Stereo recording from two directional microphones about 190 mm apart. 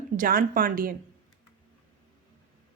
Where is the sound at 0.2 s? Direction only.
50° right (ahead or behind).